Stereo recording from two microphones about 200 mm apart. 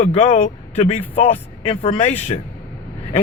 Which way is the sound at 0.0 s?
30° left (ahead or behind).